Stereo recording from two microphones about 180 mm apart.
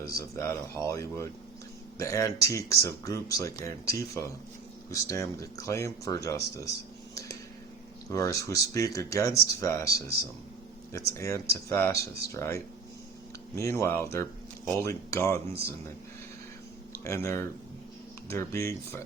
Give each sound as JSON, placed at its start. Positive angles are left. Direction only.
{"t": 0.2, "sound": "speech", "side_deg": 15}
{"t": 7.1, "sound": "tick", "side_deg": 20}
{"t": 8.1, "sound": "speech", "side_deg": 20}
{"t": 10.9, "sound": "speech", "side_deg": 15}
{"t": 17.0, "sound": "speech", "side_deg": 15}